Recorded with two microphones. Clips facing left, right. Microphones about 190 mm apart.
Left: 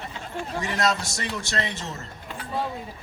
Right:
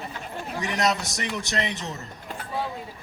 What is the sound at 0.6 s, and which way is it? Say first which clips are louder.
A man's voice: even; 20° right (ahead or behind).